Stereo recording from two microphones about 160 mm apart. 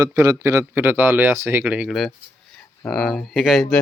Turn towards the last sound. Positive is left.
turn(degrees=0)  # may be behind; listen again after turning